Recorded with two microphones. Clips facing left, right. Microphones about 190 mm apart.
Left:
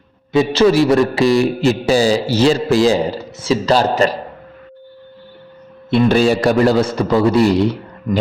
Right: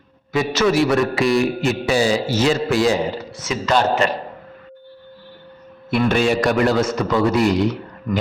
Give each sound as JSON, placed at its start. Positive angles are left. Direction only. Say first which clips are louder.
{"t": 0.3, "sound": "a man's voice", "louder": "left 5 dB", "side_deg": 30}
{"t": 5.9, "sound": "a man's voice", "louder": "left 5 dB", "side_deg": 30}